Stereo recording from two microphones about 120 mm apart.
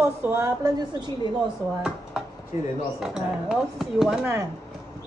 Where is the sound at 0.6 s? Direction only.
35° right (ahead or behind).